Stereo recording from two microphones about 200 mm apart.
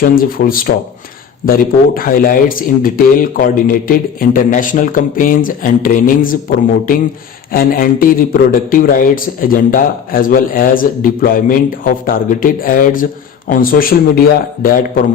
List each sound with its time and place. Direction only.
0.0 s a man's voice: 45° left (ahead or behind)
7.5 s a man's voice: 45° left (ahead or behind)